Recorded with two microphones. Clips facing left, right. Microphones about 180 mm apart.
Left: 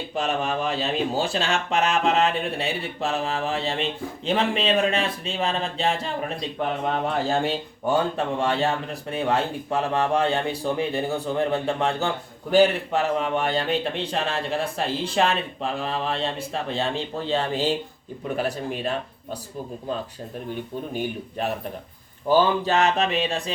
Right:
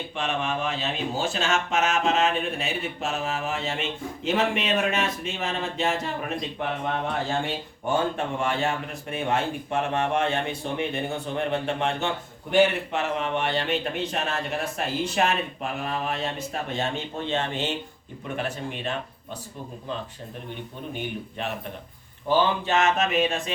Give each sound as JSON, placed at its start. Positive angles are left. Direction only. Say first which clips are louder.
{"t": 0.1, "sound": "speech", "louder": "left 4 dB", "side_deg": 40}
{"t": 20.9, "sound": "speech", "louder": "left 3 dB", "side_deg": 40}